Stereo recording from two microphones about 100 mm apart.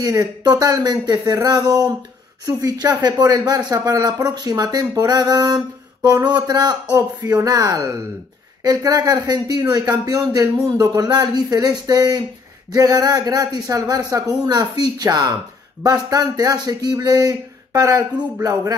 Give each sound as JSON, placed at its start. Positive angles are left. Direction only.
{"t": 0.0, "sound": "speech", "side_deg": -35}